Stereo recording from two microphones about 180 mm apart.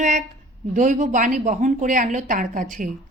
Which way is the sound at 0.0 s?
45° right (ahead or behind).